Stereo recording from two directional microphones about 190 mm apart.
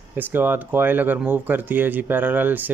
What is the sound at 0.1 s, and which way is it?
Speech, 10° right (ahead or behind).